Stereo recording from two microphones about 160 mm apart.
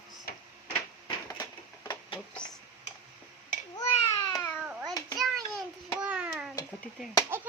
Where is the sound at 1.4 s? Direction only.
25° left (ahead or behind).